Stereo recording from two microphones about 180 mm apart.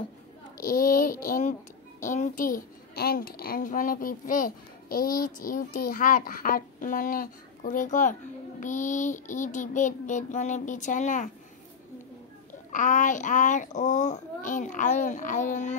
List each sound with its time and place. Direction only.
0.6 s a child's voice: 50° left (ahead or behind)
12.7 s a child's voice: 45° left (ahead or behind)